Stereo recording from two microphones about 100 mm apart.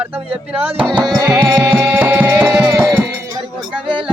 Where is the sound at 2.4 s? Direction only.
5° right (ahead or behind).